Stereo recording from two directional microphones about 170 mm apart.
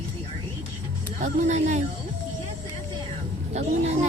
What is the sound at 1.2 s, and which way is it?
Speech, 45° right (ahead or behind).